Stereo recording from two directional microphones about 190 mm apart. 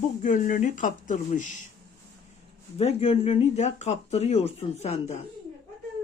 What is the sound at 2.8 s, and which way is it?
Speech, 30° left (ahead or behind).